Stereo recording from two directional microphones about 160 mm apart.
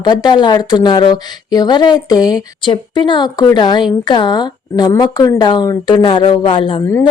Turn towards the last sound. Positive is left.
turn(degrees=30)  # may be behind; listen again after turning